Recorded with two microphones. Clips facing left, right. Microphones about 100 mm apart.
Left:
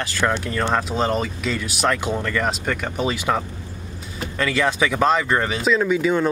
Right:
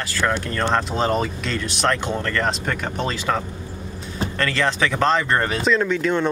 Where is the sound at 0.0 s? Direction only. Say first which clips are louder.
Left 1 dB; 20° left (ahead or behind).